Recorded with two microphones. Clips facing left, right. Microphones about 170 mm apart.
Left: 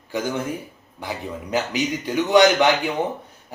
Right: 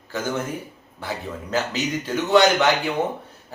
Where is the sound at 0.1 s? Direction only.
15° left (ahead or behind).